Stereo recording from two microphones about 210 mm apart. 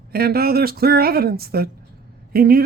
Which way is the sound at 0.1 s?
45° right (ahead or behind).